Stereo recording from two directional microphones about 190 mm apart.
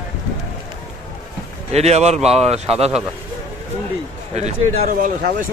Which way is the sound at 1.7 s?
35° right (ahead or behind).